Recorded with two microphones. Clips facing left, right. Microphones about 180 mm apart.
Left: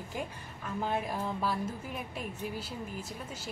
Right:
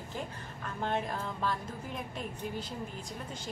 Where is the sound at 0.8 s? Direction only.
5° left (ahead or behind).